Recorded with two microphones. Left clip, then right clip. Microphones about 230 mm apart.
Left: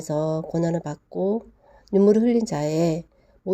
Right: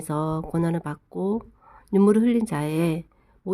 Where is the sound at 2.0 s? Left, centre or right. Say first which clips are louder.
Left 2 dB; centre.